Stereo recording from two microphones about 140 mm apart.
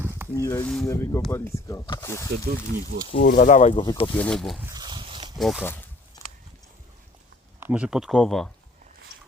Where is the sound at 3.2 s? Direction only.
90° left.